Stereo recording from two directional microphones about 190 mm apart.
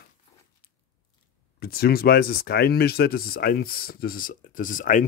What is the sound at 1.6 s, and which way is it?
Speech, 55° left (ahead or behind).